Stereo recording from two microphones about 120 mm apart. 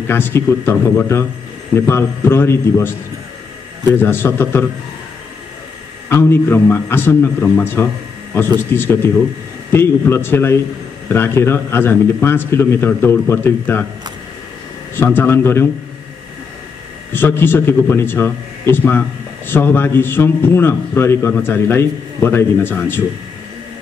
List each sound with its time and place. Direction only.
0.1 s speech: 20° left (ahead or behind)
3.9 s speech: 20° left (ahead or behind)
6.0 s a man's voice: 20° left (ahead or behind)
15.0 s speech: 20° left (ahead or behind)
17.1 s a man's voice: 20° left (ahead or behind)